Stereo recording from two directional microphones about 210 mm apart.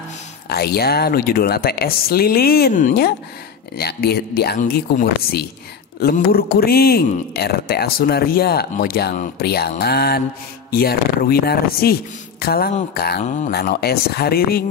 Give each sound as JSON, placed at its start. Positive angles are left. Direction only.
{"t": 0.5, "sound": "speech", "side_deg": 50}